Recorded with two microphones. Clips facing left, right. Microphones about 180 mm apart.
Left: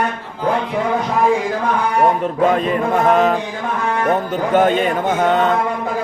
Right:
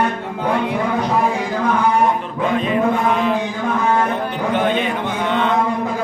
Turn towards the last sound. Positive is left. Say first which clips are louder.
# left 4 dB
turn(degrees=45)  # may be behind; listen again after turning